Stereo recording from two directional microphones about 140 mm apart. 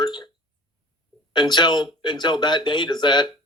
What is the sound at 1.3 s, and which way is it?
A man's voice, 30° left (ahead or behind).